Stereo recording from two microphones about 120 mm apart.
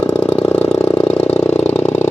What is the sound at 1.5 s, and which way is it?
Engine, 15° left (ahead or behind).